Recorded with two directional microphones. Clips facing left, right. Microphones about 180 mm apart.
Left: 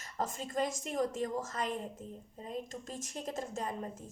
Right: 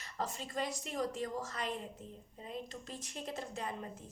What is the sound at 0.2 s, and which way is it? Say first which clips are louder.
A woman's voice: left 4 dB; 45° left (ahead or behind).